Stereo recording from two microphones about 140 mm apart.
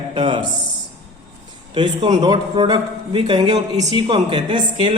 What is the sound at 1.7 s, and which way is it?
A man's voice, 30° right (ahead or behind).